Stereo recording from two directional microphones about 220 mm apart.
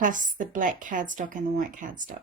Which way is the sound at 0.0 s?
35° right (ahead or behind).